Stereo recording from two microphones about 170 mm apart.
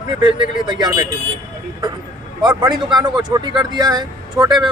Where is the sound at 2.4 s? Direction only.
25° right (ahead or behind).